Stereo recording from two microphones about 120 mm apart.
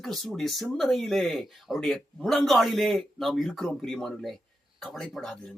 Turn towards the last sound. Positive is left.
turn(degrees=5)  # may be behind; listen again after turning